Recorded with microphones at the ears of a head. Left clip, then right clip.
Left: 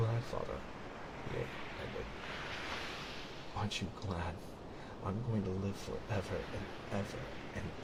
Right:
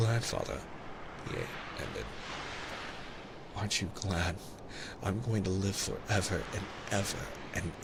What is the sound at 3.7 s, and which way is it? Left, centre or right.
Speech, right.